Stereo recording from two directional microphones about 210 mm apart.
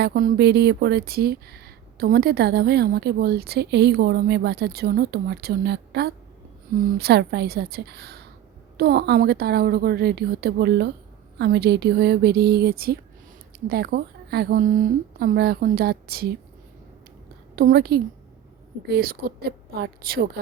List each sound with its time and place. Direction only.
0.0 s speech: 45° right (ahead or behind)
17.5 s a woman's voice: 45° right (ahead or behind)